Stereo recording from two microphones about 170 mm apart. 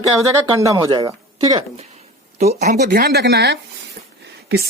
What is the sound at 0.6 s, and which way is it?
Speech, 20° right (ahead or behind).